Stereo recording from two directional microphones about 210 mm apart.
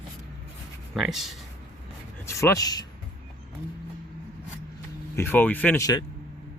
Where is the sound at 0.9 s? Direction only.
Centre (ahead or behind).